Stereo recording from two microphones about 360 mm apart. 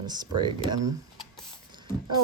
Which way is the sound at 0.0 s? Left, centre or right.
Centre.